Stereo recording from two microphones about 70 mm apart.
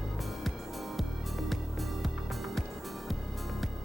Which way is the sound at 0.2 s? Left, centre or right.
Centre.